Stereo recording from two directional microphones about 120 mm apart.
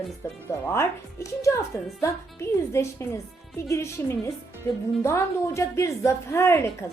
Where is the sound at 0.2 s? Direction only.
25° left (ahead or behind).